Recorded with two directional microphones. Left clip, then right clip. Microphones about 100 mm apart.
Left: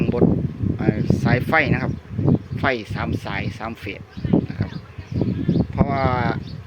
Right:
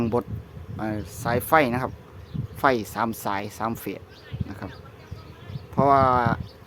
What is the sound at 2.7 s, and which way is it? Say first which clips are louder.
Speech: right 1 dB; 45° right (ahead or behind).